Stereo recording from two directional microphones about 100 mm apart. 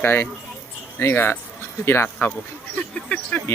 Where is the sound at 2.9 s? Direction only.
10° left (ahead or behind).